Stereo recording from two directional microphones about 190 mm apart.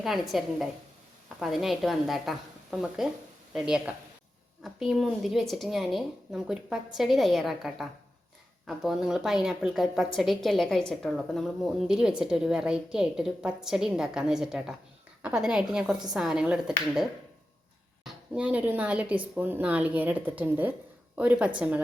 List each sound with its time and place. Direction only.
0.0 s speech: centre (ahead or behind)
18.0 s speech: 5° right (ahead or behind)